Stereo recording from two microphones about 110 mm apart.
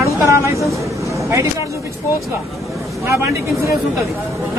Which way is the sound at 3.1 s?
25° right (ahead or behind).